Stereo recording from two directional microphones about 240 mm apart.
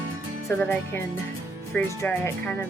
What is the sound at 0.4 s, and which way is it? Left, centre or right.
Speech, centre.